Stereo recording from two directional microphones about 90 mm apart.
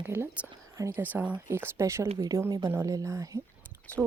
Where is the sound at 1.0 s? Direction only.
15° right (ahead or behind).